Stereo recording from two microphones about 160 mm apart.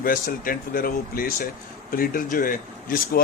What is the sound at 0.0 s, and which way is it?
Speech, 60° left (ahead or behind).